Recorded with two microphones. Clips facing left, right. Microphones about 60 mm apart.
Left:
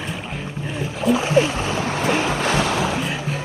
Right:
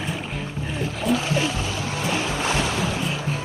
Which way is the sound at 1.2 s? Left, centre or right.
Left.